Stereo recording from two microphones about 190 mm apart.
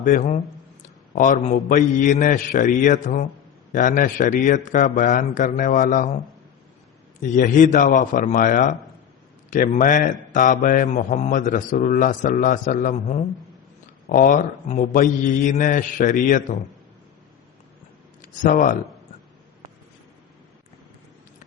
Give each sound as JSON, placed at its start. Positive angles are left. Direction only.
{"t": 0.0, "sound": "a man's voice", "side_deg": 45}
{"t": 7.2, "sound": "a man's voice", "side_deg": 45}
{"t": 18.2, "sound": "speech", "side_deg": 45}